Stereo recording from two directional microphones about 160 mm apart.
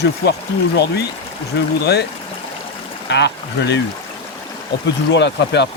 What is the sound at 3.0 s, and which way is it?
Speech, 90° left.